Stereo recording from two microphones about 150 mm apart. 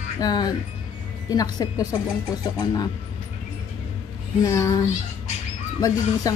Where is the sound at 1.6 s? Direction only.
25° left (ahead or behind).